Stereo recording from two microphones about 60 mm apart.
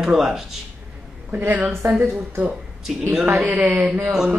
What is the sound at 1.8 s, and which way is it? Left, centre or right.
Speech, right.